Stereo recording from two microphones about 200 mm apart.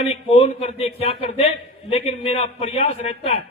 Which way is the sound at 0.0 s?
30° left (ahead or behind).